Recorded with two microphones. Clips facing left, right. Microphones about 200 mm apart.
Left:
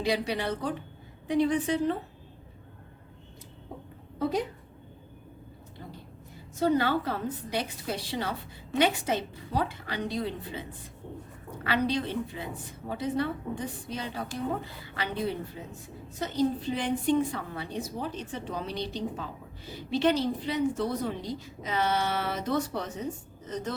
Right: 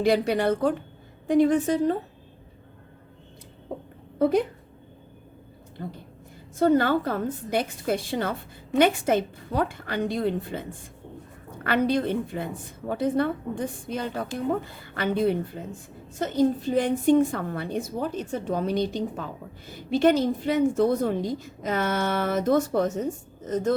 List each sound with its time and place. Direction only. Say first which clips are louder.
0.0 s a woman's voice: right 7 dB; 50° right (ahead or behind)
4.2 s a woman's voice: right 7 dB; 55° right (ahead or behind)
5.8 s a woman's voice: right 8 dB; 60° right (ahead or behind)